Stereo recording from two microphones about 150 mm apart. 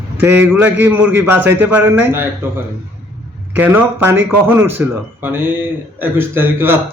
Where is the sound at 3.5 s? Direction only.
15° right (ahead or behind).